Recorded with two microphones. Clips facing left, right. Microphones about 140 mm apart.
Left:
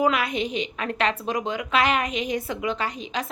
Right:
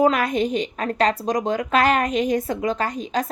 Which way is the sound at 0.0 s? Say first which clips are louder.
Right 4 dB; 45° right (ahead or behind).